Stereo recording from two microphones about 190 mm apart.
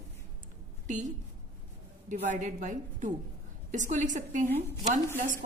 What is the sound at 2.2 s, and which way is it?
A woman's voice, 40° right (ahead or behind).